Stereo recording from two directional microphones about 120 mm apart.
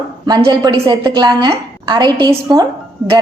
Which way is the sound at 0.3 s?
35° right (ahead or behind).